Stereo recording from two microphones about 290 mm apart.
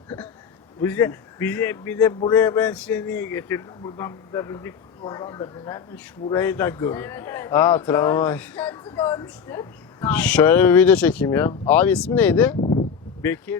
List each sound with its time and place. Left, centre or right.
0.8 s a man's voice: centre
12.5 s a sound: left
13.2 s a man's voice: centre